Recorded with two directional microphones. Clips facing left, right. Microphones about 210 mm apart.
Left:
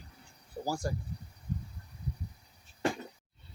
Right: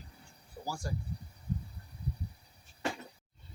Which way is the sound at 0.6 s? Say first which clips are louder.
Left 6 dB; 40° left (ahead or behind).